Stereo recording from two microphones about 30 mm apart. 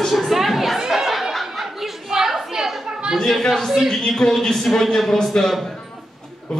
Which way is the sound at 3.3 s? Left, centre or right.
Centre.